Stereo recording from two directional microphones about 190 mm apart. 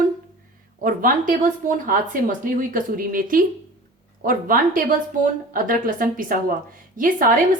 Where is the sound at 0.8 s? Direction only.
45° right (ahead or behind).